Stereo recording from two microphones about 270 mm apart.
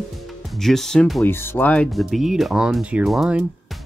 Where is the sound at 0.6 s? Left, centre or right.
Centre.